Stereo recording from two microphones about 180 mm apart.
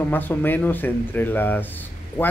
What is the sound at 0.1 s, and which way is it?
Speech, 10° left (ahead or behind).